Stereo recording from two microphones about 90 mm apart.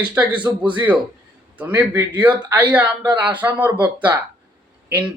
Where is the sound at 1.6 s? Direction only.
25° right (ahead or behind).